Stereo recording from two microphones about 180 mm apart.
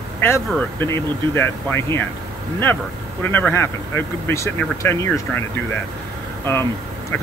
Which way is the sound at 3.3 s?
10° left (ahead or behind).